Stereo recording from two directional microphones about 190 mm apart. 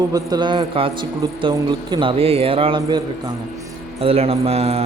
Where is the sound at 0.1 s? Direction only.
20° right (ahead or behind).